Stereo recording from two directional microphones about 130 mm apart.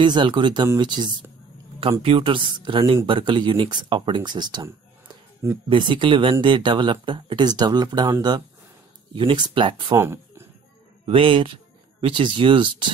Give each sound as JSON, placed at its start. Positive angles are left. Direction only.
{"t": 0.0, "sound": "speech", "side_deg": -35}
{"t": 1.8, "sound": "speech", "side_deg": -45}
{"t": 5.7, "sound": "speech", "side_deg": -40}
{"t": 9.9, "sound": "speech", "side_deg": -20}
{"t": 11.1, "sound": "speech", "side_deg": -40}